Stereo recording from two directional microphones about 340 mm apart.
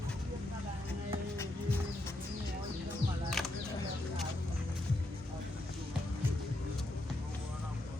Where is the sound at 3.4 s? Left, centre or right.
Centre.